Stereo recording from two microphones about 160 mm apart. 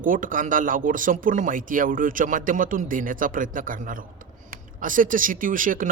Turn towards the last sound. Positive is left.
turn(degrees=-60)  # may be behind; listen again after turning